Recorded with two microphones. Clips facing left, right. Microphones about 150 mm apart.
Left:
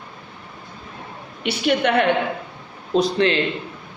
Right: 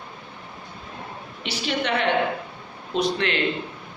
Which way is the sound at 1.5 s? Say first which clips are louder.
Left 7 dB; 55° left (ahead or behind).